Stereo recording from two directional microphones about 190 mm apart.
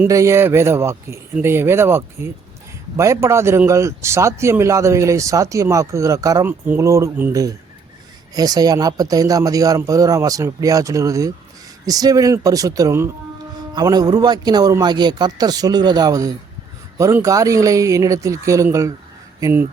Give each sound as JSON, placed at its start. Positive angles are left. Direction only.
{"t": 0.0, "sound": "a man's voice", "side_deg": -15}